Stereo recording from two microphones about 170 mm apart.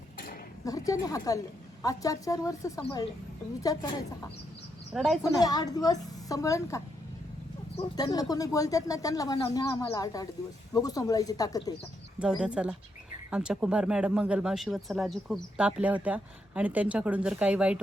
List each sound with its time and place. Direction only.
0.6 s a woman's voice: 20° left (ahead or behind)
4.9 s speech: centre (ahead or behind)
5.2 s speech: 20° left (ahead or behind)
7.9 s speech: 20° left (ahead or behind)
12.2 s speech: 5° right (ahead or behind)